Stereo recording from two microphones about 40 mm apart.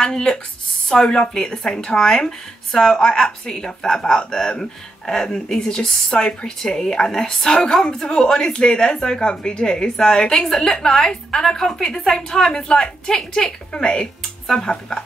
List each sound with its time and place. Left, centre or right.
0.0 s a woman's voice: left